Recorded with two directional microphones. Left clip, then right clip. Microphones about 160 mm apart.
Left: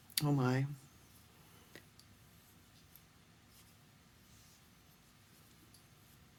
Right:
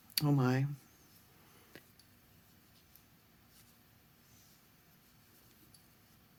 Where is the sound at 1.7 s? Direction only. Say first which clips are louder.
Even; 25° right (ahead or behind).